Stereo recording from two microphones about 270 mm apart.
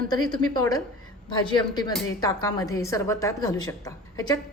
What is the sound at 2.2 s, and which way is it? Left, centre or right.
A woman's voice, centre.